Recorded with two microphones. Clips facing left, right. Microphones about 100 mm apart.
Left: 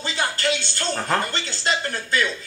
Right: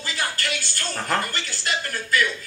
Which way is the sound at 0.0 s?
25° left (ahead or behind).